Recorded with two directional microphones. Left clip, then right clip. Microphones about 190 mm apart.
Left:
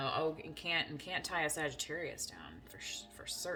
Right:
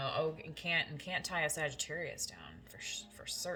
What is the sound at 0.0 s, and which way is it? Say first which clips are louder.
A woman's voice: even; 30° left (ahead or behind).